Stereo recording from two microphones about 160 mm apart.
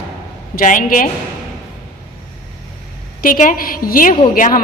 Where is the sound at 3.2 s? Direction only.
55° left (ahead or behind).